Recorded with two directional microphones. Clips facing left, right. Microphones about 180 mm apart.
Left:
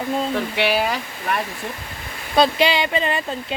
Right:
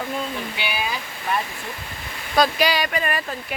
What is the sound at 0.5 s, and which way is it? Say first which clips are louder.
Speech: left 8 dB; 70° left (ahead or behind).